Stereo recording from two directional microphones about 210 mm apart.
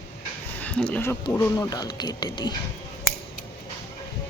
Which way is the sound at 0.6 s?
5° left (ahead or behind).